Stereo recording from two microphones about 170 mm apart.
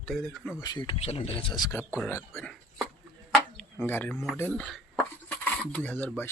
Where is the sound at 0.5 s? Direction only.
20° left (ahead or behind).